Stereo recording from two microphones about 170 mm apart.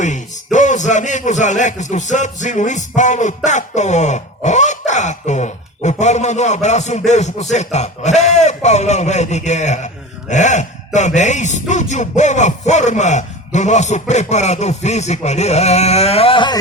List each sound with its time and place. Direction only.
0.0 s a man's voice: 45° left (ahead or behind); by 16.6 s 30° left (ahead or behind)